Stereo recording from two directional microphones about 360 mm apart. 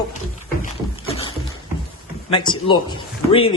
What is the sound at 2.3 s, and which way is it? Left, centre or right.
A man's voice, centre.